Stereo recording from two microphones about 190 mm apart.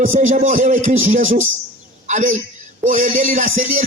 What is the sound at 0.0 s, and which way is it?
Speech, 40° right (ahead or behind).